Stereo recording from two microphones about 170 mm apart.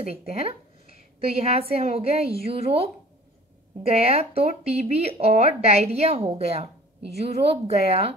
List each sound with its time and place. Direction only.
0.0 s speech: 35° right (ahead or behind)